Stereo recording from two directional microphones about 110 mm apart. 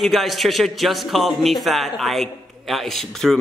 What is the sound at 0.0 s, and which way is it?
Speech, centre (ahead or behind).